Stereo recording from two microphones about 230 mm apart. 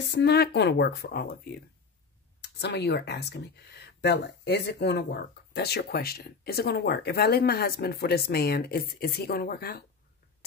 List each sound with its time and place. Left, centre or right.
0.1 s speech: left